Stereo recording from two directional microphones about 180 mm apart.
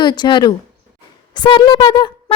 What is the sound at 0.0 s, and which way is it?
Speech, 25° left (ahead or behind).